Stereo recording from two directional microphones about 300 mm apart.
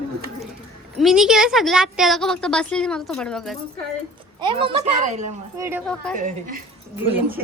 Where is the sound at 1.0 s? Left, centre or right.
Centre.